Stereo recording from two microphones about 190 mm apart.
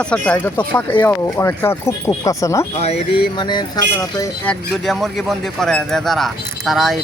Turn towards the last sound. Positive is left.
turn(degrees=0)  # may be behind; listen again after turning